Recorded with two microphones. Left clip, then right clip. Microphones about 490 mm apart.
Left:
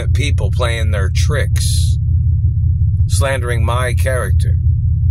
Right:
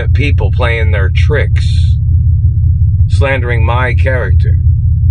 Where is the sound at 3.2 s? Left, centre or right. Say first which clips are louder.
Right 5 dB; left.